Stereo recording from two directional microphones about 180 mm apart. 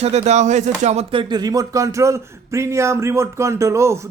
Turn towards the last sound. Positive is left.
turn(degrees=-15)  # may be behind; listen again after turning